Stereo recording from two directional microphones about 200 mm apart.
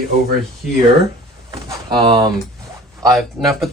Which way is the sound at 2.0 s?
20° right (ahead or behind).